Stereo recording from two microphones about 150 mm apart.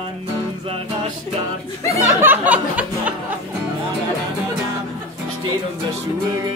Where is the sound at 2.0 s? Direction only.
15° right (ahead or behind).